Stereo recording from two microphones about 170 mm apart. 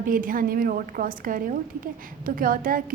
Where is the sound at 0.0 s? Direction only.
55° right (ahead or behind).